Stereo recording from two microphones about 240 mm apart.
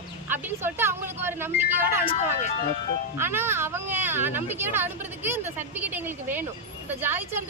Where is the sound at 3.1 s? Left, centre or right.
Centre.